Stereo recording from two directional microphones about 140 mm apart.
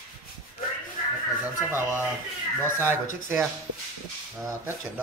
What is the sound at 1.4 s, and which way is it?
Speech, 15° right (ahead or behind).